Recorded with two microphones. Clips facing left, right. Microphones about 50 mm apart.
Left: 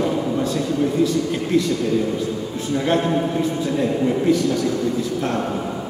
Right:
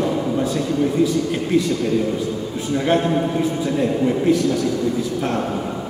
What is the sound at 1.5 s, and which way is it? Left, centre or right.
Speech, centre.